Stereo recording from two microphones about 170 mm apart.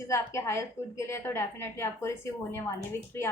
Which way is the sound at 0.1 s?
15° left (ahead or behind).